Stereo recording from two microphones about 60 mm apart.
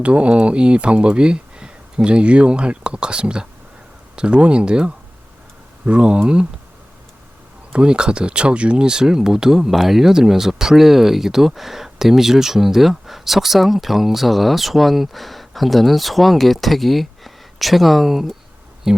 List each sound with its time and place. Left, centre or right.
0.0 s speech: right
7.7 s speech: centre